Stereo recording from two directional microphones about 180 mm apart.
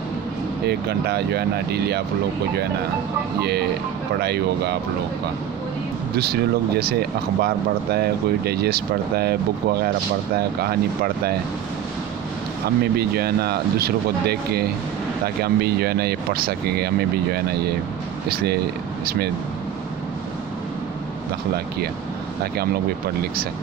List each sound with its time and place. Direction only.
0.7 s speech: 65° right (ahead or behind)
3.3 s speech: 65° right (ahead or behind)
6.1 s speech: 60° right (ahead or behind)
12.6 s speech: 60° right (ahead or behind)
19.0 s speech: 60° right (ahead or behind)